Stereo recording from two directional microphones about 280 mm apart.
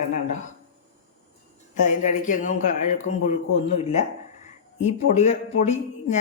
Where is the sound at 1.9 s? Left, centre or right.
Left.